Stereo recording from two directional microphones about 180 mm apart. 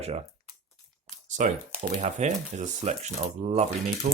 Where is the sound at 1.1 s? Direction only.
45° right (ahead or behind).